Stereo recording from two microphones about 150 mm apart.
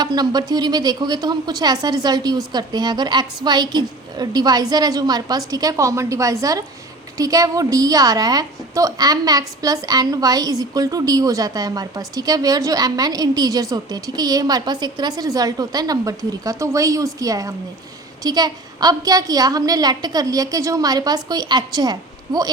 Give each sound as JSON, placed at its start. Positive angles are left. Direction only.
{"t": 0.0, "sound": "a woman's voice", "side_deg": -25}